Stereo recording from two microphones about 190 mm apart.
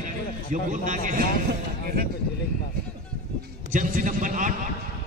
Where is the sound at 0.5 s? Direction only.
45° right (ahead or behind).